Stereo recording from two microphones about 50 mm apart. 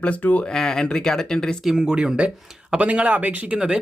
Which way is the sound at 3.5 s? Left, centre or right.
Centre.